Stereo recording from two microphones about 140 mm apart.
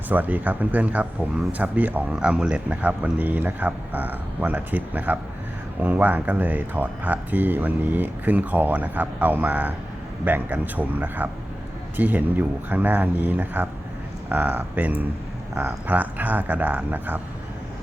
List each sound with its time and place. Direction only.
0.1 s speech: 10° right (ahead or behind)